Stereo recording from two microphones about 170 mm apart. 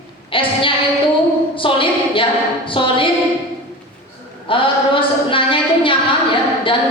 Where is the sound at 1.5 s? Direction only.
30° left (ahead or behind).